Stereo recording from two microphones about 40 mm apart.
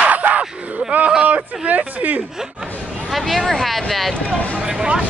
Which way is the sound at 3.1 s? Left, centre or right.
Centre.